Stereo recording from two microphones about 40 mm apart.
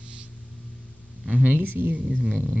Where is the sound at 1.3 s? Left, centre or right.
Right.